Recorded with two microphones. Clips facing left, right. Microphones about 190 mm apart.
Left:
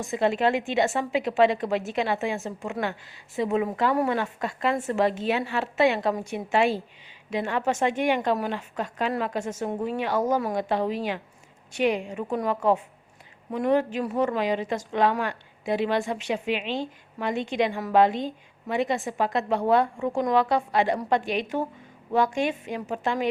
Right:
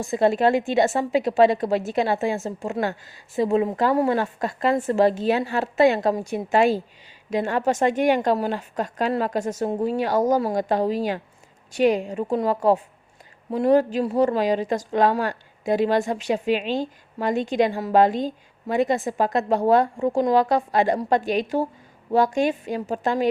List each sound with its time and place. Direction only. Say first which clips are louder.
0.0 s a woman's voice: right 4 dB; 35° right (ahead or behind)